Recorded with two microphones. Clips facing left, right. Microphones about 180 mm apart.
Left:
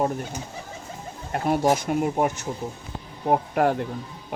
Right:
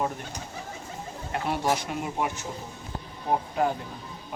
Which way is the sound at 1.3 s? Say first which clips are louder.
Left 6 dB; 45° left (ahead or behind).